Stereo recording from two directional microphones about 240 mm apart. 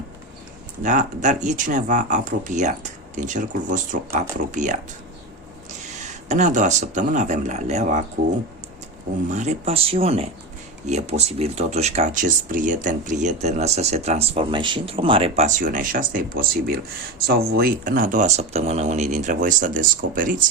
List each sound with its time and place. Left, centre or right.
0.8 s speech: right
6.0 s speech: right
9.3 s speech: right